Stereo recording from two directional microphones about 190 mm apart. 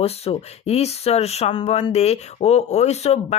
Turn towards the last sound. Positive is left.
turn(degrees=35)  # may be behind; listen again after turning